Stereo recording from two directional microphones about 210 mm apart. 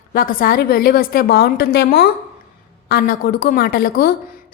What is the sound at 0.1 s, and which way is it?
A woman's voice, 45° left (ahead or behind).